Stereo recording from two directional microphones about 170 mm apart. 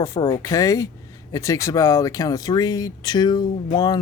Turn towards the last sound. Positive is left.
turn(degrees=25)  # may be behind; listen again after turning